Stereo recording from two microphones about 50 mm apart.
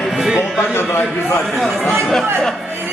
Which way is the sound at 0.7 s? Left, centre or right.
Left.